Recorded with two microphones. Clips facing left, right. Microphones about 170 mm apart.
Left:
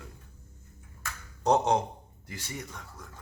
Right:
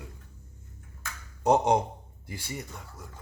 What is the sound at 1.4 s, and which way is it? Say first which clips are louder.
Speech: right 2 dB; 10° right (ahead or behind).